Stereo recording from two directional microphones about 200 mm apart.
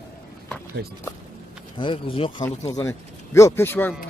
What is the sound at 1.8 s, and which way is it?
Speech, 25° left (ahead or behind).